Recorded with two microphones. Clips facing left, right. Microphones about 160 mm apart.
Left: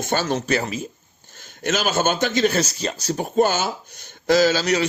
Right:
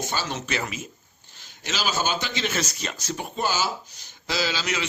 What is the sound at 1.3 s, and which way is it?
Speech, 50° left (ahead or behind).